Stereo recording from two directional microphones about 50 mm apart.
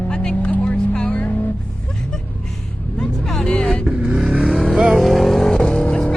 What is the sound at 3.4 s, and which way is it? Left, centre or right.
Vehicle, centre.